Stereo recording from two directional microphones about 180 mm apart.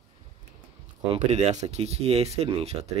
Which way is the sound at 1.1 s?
35° right (ahead or behind).